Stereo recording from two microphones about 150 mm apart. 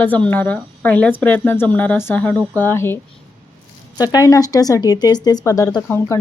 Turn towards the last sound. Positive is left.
turn(degrees=20)  # may be behind; listen again after turning